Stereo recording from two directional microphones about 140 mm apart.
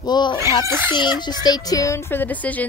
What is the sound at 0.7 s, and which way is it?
Speech, 15° right (ahead or behind).